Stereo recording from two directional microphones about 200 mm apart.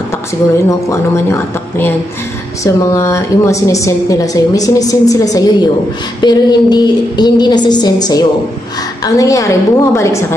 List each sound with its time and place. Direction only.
0.7 s a woman's voice: 15° left (ahead or behind)